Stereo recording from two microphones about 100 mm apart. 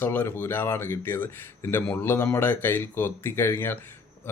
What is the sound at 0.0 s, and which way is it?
Speech, 25° left (ahead or behind).